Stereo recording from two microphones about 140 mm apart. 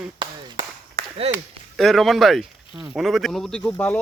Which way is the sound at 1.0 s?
90° right.